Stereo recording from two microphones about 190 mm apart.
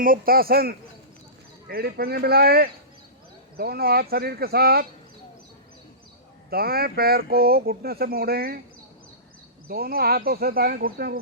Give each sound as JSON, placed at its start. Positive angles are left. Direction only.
{"t": 0.0, "sound": "speech", "side_deg": -50}
{"t": 6.5, "sound": "speech", "side_deg": -55}
{"t": 9.6, "sound": "speech", "side_deg": -55}